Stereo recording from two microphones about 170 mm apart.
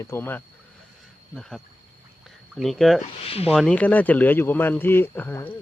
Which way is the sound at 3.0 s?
35° left (ahead or behind).